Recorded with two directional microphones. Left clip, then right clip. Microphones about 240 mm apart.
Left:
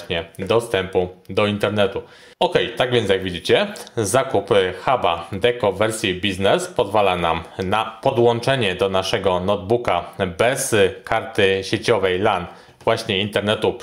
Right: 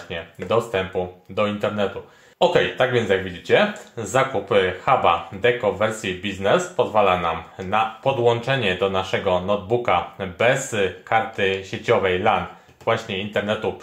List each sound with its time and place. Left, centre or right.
0.1 s speech: left